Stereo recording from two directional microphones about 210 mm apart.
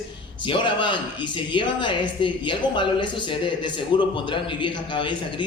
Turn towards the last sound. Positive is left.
turn(degrees=20)  # may be behind; listen again after turning